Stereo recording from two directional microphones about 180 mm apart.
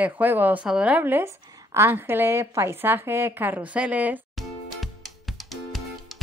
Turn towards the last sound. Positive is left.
turn(degrees=0)  # may be behind; listen again after turning